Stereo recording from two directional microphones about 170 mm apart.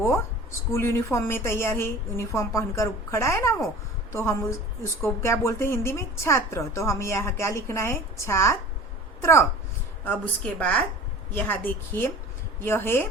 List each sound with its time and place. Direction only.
0.7 s a woman's voice: 15° left (ahead or behind)